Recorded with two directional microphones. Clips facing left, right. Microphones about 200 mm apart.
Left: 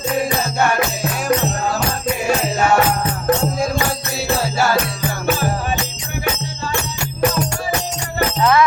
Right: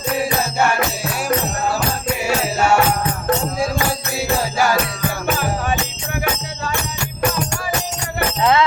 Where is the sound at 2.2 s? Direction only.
10° right (ahead or behind).